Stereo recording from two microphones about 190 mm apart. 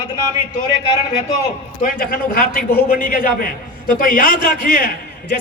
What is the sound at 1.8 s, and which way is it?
A man's voice, 45° left (ahead or behind).